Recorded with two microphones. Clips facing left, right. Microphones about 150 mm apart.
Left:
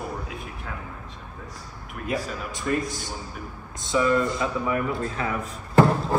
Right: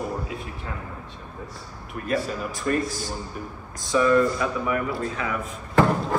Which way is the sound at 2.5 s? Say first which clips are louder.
Even; 20° left (ahead or behind).